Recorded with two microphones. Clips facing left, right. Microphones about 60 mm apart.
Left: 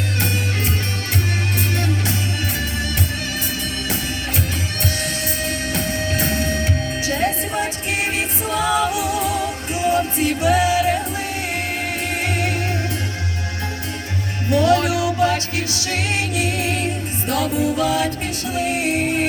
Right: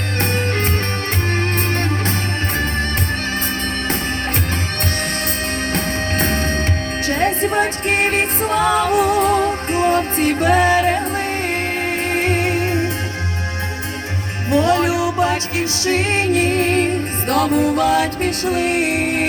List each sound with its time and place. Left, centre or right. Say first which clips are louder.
1.7 s music: right 2 dB; right
5.7 s music: right 2 dB; right
12.1 s music: right 5 dB; right
14.5 s music: right 1 dB; right